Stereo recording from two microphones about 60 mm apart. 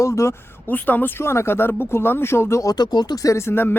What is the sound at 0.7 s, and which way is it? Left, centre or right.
Speech, left.